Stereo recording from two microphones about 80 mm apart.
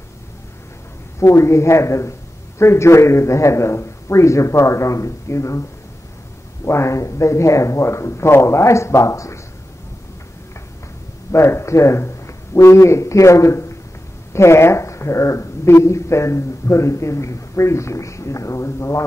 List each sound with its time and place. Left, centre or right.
1.2 s speech: left
6.6 s speech: left
11.3 s a man's voice: left